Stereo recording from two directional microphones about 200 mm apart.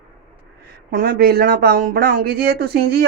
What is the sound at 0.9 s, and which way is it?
A woman's voice, 45° right (ahead or behind).